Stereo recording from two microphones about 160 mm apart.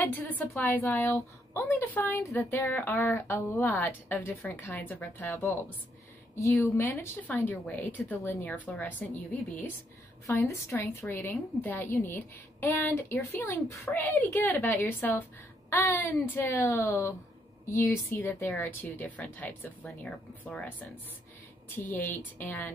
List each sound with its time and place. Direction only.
0.0 s a woman's voice: 10° left (ahead or behind)
10.2 s a woman's voice: 20° left (ahead or behind); by 20.6 s centre (ahead or behind)
21.9 s a woman's voice: 10° left (ahead or behind)